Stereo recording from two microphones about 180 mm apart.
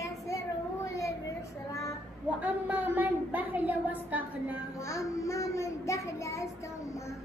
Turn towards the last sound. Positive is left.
turn(degrees=15)  # may be behind; listen again after turning